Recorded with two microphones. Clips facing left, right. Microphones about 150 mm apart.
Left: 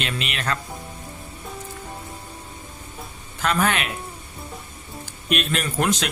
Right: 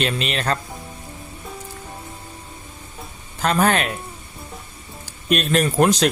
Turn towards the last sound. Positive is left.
turn(degrees=-35)  # may be behind; listen again after turning